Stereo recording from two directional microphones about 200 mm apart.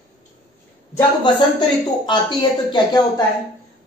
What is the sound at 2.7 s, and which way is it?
Speech, 20° left (ahead or behind).